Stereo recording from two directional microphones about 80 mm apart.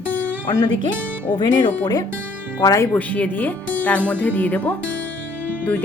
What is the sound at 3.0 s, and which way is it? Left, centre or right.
Speech, centre.